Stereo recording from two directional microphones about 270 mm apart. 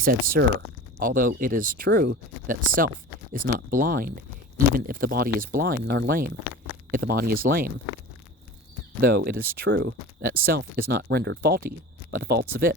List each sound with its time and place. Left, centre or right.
0.0 s speech: right
9.0 s speech: right